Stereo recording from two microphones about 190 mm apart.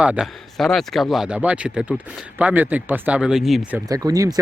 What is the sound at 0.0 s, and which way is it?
Speech, 5° right (ahead or behind).